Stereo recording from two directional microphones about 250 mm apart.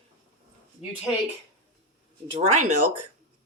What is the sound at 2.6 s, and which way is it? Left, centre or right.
Speech, right.